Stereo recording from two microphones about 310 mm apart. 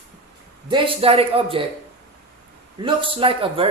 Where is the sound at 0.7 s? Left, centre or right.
Centre.